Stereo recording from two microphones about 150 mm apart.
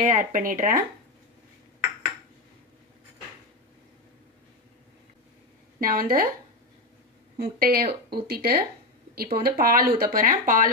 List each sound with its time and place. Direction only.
0.0 s speech: 55° right (ahead or behind)
5.8 s speech: 70° right (ahead or behind)
7.3 s speech: 85° right; by 10.7 s 65° right (ahead or behind)